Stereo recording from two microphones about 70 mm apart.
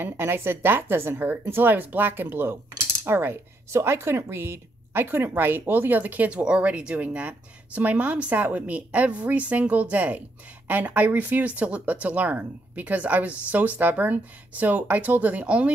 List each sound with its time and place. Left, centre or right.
0.0 s a woman's voice: right; by 15.7 s centre